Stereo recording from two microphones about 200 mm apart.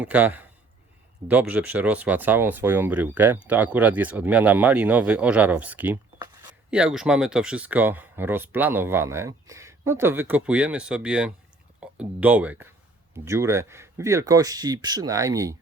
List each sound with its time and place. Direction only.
0.0 s speech: 5° right (ahead or behind)